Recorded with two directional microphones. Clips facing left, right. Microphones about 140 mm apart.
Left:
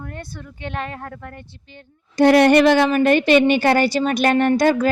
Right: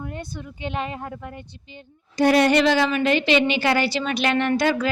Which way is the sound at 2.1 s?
55° left (ahead or behind).